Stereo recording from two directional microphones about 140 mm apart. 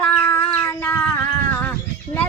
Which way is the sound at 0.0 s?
10° left (ahead or behind).